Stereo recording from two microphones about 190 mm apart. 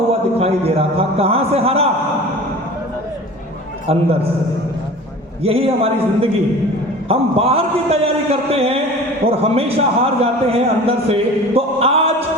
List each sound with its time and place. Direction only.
0.1 s a man's voice: 30° right (ahead or behind)
3.8 s a man's voice: 30° right (ahead or behind)
5.4 s a man's voice: 30° right (ahead or behind)